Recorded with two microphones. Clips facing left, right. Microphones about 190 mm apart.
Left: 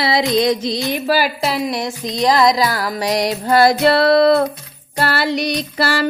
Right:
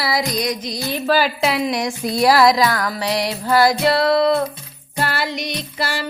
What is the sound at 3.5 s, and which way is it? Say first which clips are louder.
Music: left 3 dB; 25° left (ahead or behind).